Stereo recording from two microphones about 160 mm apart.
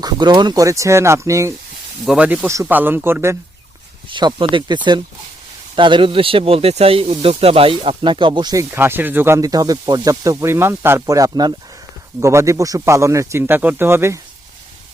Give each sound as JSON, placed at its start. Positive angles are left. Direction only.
{"t": 0.0, "sound": "speech", "side_deg": -30}
{"t": 2.0, "sound": "speech", "side_deg": -10}
{"t": 4.1, "sound": "speech", "side_deg": -30}
{"t": 8.7, "sound": "speech", "side_deg": -15}